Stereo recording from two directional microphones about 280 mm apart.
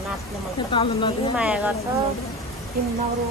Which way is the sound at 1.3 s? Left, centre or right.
Centre.